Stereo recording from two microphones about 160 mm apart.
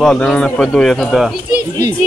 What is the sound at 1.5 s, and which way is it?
Speech, 20° left (ahead or behind).